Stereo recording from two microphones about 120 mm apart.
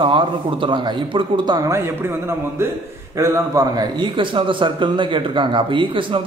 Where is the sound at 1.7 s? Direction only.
20° right (ahead or behind); by 6.2 s 45° right (ahead or behind).